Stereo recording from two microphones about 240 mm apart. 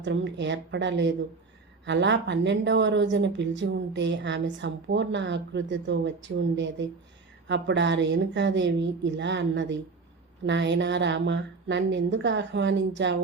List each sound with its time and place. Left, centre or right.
0.0 s speech: right